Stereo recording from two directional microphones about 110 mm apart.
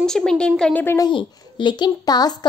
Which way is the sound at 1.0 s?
45° left (ahead or behind).